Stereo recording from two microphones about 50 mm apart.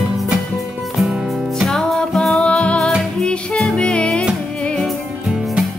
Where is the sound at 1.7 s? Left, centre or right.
Centre.